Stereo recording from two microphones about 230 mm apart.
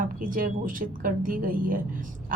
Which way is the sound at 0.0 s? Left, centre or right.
Right.